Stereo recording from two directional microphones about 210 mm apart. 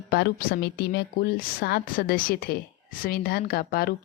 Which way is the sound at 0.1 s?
50° left (ahead or behind).